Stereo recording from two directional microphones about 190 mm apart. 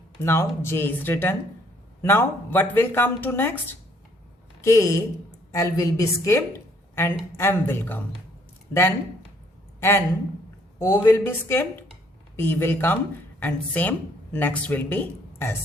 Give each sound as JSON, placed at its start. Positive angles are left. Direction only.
{"t": 0.2, "sound": "a woman's voice", "side_deg": 15}
{"t": 10.8, "sound": "speech", "side_deg": 15}